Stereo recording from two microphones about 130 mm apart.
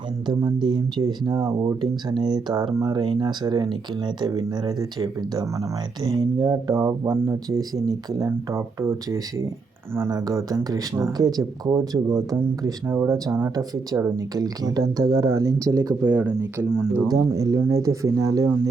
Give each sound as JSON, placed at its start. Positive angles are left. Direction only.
{"t": 0.3, "sound": "speech", "side_deg": -35}
{"t": 16.0, "sound": "speech", "side_deg": -15}
{"t": 17.1, "sound": "speech", "side_deg": -25}